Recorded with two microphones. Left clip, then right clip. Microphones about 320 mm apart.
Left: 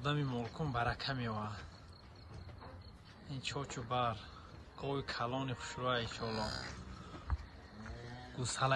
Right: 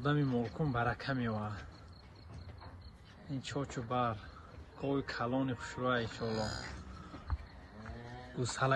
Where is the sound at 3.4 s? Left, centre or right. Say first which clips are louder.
Right 1 dB; centre.